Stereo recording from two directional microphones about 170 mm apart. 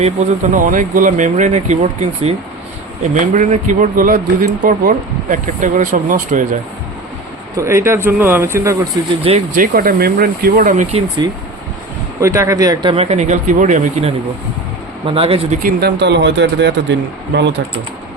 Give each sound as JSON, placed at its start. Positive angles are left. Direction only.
{"t": 0.0, "sound": "speech", "side_deg": -45}
{"t": 3.3, "sound": "speech", "side_deg": -45}
{"t": 7.5, "sound": "speech", "side_deg": -15}
{"t": 9.6, "sound": "speech", "side_deg": -60}
{"t": 11.2, "sound": "speech", "side_deg": -25}
{"t": 15.0, "sound": "speech", "side_deg": -30}
{"t": 15.6, "sound": "speech", "side_deg": -80}